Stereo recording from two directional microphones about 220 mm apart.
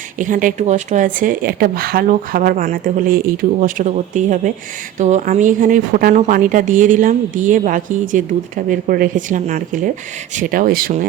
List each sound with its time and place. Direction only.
0.2 s speech: 35° right (ahead or behind)